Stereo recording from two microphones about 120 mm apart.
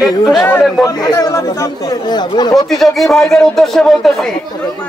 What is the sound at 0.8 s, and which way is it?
Speech, 30° left (ahead or behind).